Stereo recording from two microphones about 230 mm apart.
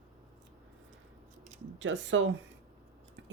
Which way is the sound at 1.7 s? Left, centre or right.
Right.